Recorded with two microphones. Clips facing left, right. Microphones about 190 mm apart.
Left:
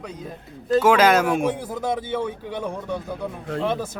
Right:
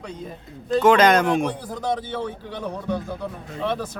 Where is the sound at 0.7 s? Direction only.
5° left (ahead or behind).